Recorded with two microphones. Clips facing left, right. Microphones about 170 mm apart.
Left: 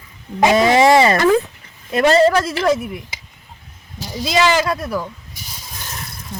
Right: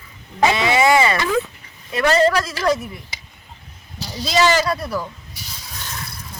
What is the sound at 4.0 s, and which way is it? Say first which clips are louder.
Speech: left 3 dB; 45° left (ahead or behind).